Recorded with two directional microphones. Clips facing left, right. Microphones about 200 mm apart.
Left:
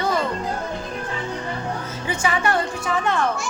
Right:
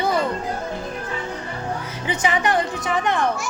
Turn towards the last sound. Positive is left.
turn(degrees=-15)  # may be behind; listen again after turning